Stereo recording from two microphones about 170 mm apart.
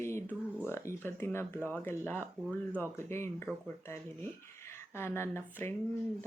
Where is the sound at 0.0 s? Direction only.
15° left (ahead or behind).